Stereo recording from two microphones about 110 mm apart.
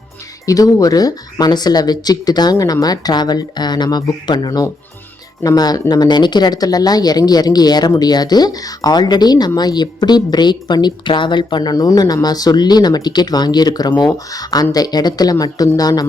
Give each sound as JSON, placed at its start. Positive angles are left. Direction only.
{"t": 0.4, "sound": "speech", "side_deg": 35}